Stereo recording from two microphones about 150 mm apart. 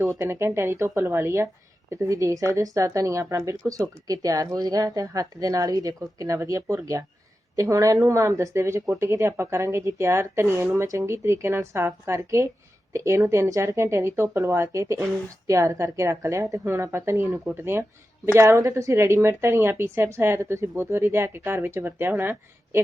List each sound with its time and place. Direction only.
0.0 s a woman's voice: 15° right (ahead or behind)